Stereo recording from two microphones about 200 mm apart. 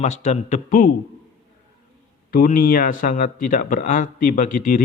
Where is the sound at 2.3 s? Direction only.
45° left (ahead or behind).